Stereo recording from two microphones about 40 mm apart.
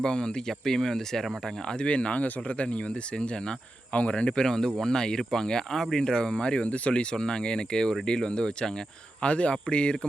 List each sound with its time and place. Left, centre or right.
0.0 s speech: centre
1.6 s speech: left